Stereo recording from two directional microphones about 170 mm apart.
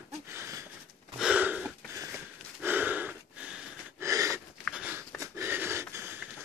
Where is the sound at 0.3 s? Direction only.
15° right (ahead or behind).